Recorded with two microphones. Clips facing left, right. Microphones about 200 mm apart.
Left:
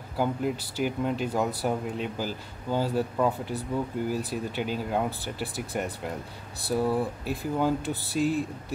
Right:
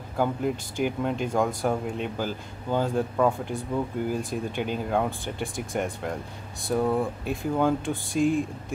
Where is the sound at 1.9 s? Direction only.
50° right (ahead or behind).